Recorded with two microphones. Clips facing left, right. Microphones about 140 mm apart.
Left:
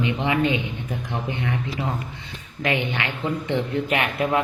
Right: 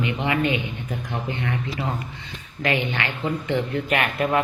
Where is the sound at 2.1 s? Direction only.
20° left (ahead or behind).